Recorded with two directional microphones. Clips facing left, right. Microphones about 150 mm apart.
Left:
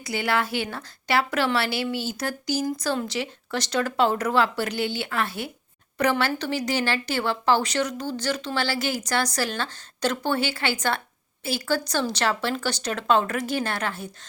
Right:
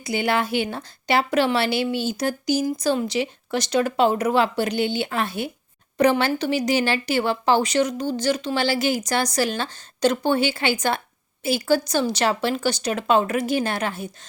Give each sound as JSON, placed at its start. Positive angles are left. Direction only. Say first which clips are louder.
{"t": 0.0, "sound": "a woman's voice", "louder": "right 3 dB", "side_deg": -20}